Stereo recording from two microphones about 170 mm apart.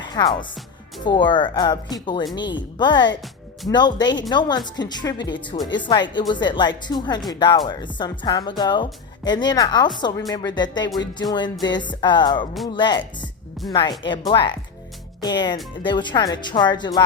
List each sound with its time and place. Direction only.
0.0 s music: 25° left (ahead or behind)
1.0 s a woman's voice: 25° left (ahead or behind)